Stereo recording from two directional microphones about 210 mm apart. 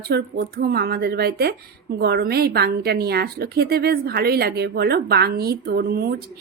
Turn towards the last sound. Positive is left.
turn(degrees=-45)  # may be behind; listen again after turning